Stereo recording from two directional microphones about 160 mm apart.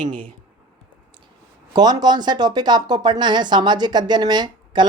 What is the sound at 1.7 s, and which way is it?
A woman's voice, 25° right (ahead or behind).